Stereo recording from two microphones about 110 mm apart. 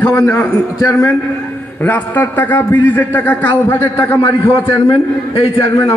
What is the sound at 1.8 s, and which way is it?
A man's voice, 15° left (ahead or behind).